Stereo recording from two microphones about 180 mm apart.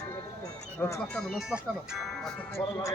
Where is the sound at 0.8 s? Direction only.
10° left (ahead or behind).